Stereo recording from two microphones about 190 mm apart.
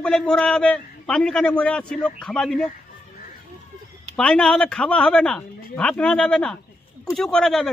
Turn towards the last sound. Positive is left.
turn(degrees=0)  # may be behind; listen again after turning